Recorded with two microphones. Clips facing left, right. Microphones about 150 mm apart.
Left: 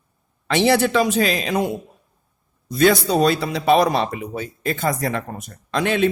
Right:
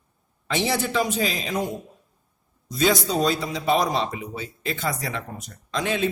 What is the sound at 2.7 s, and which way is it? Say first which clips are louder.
A man's voice: left 5 dB; 60° left (ahead or behind).